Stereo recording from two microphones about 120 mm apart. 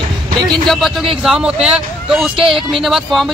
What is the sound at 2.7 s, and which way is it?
Speech, centre (ahead or behind).